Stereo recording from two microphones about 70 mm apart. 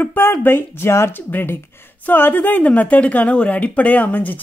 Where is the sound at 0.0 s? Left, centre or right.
Left.